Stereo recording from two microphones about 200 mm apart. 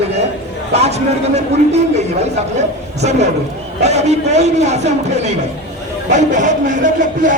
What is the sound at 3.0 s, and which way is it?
A man's voice, 35° right (ahead or behind).